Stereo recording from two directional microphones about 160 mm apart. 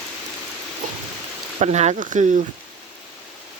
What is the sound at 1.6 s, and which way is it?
Speech, 45° right (ahead or behind).